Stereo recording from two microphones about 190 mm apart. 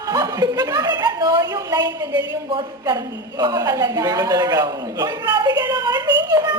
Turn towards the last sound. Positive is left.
turn(degrees=-20)  # may be behind; listen again after turning